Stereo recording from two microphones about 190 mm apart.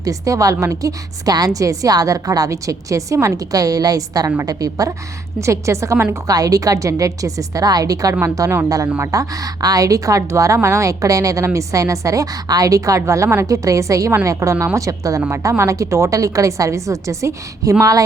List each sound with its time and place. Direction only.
0.0 s speech: 15° right (ahead or behind)